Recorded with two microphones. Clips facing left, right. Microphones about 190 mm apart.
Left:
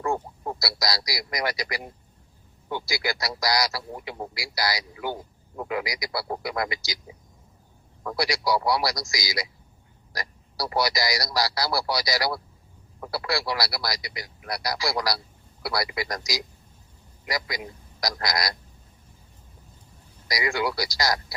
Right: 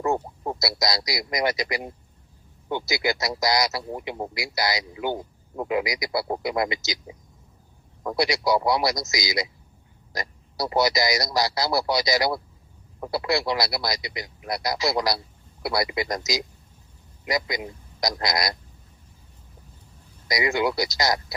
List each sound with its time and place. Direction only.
0.0 s a man's voice: 20° right (ahead or behind)
8.0 s a man's voice: 20° right (ahead or behind)
20.2 s a man's voice: 20° right (ahead or behind)